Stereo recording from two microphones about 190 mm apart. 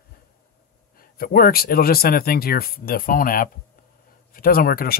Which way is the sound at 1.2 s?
50° left (ahead or behind).